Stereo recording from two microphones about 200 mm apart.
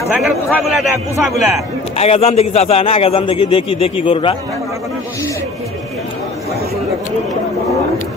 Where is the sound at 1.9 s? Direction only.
30° left (ahead or behind).